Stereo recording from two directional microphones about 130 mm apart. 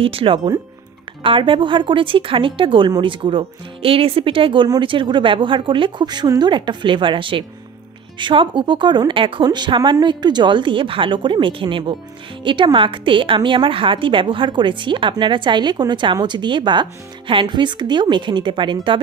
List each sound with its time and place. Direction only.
0.0 s speech: 45° right (ahead or behind)